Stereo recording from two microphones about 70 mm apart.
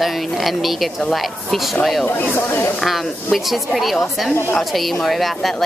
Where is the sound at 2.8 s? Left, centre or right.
Centre.